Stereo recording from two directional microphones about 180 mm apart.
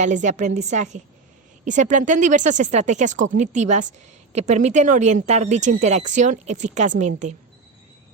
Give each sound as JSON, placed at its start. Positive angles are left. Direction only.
{"t": 0.0, "sound": "speech", "side_deg": -45}